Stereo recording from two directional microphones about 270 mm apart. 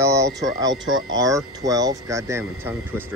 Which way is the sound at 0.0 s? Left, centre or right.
Centre.